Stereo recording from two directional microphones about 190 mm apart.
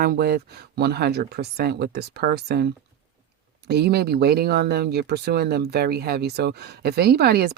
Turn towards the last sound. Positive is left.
turn(degrees=-55)  # may be behind; listen again after turning